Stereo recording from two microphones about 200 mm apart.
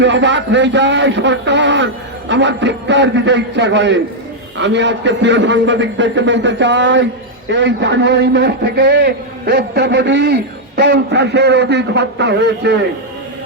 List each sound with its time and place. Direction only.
0.0 s a man's voice: 65° right (ahead or behind)